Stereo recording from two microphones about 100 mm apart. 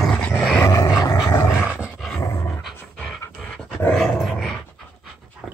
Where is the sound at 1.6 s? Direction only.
10° right (ahead or behind).